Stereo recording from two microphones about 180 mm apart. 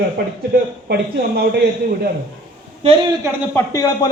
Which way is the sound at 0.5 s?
65° right (ahead or behind).